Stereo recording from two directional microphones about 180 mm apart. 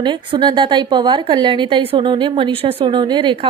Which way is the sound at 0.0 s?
25° right (ahead or behind).